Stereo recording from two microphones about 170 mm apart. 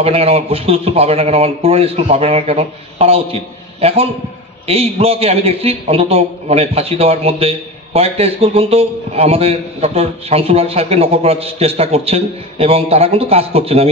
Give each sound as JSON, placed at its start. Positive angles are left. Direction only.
{"t": 0.0, "sound": "a man's voice", "side_deg": -35}